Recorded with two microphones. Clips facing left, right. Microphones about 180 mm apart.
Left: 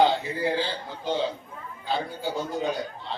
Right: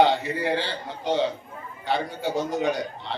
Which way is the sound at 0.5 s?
70° right (ahead or behind).